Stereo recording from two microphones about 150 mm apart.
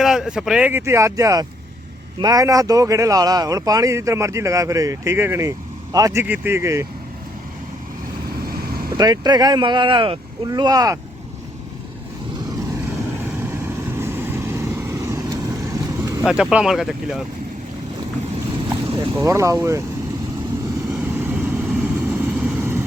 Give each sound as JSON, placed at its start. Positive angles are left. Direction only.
{"t": 0.0, "sound": "speech", "side_deg": -5}
{"t": 8.3, "sound": "vehicle", "side_deg": -90}
{"t": 9.0, "sound": "speech", "side_deg": -30}
{"t": 13.3, "sound": "vehicle", "side_deg": -15}
{"t": 16.2, "sound": "speech", "side_deg": -5}
{"t": 18.9, "sound": "speech", "side_deg": -15}
{"t": 21.1, "sound": "vehicle", "side_deg": -15}